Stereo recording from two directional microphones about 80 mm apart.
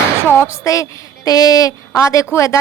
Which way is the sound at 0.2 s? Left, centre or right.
Left.